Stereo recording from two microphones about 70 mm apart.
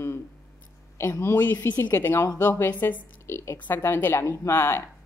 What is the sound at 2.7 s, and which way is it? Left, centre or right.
Speech, left.